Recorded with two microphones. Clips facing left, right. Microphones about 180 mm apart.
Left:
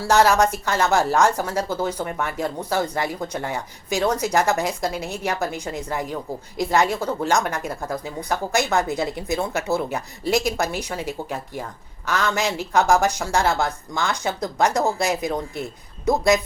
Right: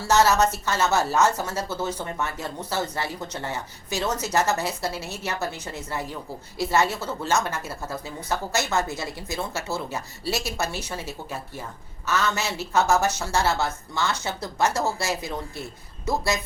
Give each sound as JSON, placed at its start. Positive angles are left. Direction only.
{"t": 0.0, "sound": "a woman's voice", "side_deg": 10}